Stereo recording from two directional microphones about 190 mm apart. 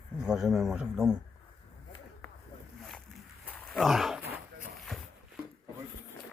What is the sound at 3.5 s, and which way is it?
Wild animals, centre (ahead or behind).